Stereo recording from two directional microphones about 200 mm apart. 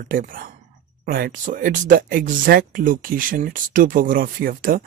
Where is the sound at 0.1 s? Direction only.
45° right (ahead or behind).